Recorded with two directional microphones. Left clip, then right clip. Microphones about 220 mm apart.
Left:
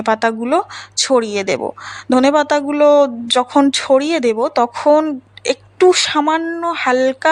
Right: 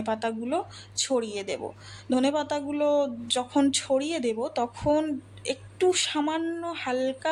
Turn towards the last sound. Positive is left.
turn(degrees=15)  # may be behind; listen again after turning